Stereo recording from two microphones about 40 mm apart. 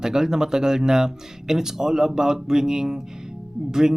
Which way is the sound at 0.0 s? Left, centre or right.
Centre.